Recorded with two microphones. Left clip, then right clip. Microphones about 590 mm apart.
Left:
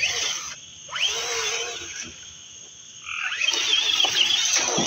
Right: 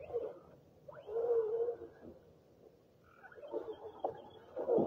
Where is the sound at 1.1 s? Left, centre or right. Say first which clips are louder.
Left 7 dB; centre.